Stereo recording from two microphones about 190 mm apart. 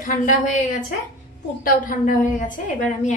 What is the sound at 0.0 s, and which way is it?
A woman's voice, 45° left (ahead or behind).